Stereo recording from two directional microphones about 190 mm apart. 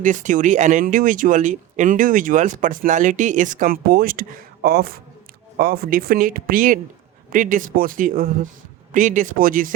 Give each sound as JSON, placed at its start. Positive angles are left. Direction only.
{"t": 0.0, "sound": "speech", "side_deg": -40}